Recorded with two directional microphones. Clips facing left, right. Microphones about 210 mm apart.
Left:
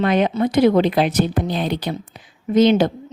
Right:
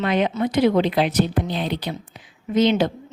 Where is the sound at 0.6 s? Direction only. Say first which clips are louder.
Left 3 dB; 50° left (ahead or behind).